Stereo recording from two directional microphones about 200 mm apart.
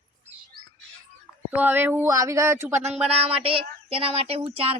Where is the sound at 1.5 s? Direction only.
10° right (ahead or behind).